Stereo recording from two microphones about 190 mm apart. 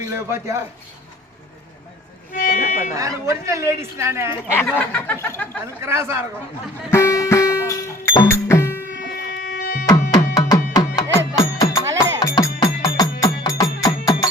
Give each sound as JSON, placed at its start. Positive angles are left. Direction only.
{"t": 0.0, "sound": "a man's voice", "side_deg": -15}
{"t": 2.3, "sound": "music", "side_deg": 45}
{"t": 2.9, "sound": "speech", "side_deg": -15}
{"t": 4.6, "sound": "a sound", "side_deg": 5}
{"t": 5.8, "sound": "speech", "side_deg": -15}
{"t": 6.9, "sound": "music", "side_deg": 15}
{"t": 9.0, "sound": "a sound", "side_deg": 50}
{"t": 9.8, "sound": "music", "side_deg": 20}